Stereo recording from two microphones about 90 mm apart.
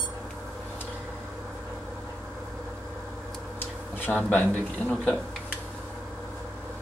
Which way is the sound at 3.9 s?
20° left (ahead or behind).